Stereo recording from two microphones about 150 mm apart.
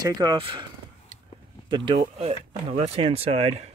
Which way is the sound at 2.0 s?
50° right (ahead or behind).